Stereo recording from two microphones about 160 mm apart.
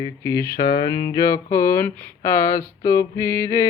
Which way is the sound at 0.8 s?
25° left (ahead or behind).